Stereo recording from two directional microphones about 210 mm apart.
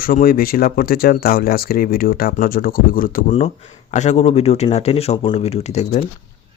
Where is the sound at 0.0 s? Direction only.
45° left (ahead or behind).